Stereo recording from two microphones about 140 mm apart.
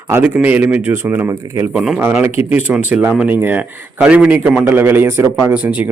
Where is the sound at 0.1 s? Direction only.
10° right (ahead or behind).